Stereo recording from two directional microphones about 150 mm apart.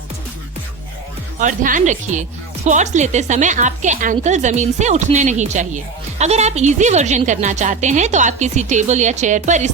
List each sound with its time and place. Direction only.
1.4 s a woman's voice: 60° right (ahead or behind)